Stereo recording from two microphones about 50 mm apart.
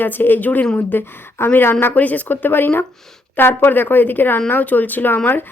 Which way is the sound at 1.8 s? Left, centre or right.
Left.